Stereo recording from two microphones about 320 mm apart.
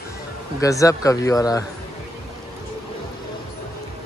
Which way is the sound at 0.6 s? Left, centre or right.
Centre.